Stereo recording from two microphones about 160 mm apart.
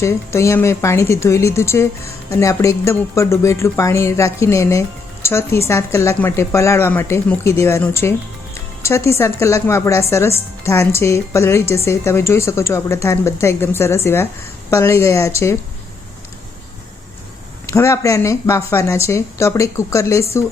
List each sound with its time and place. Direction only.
0.0 s speech: 15° left (ahead or behind)
17.7 s speech: 20° left (ahead or behind)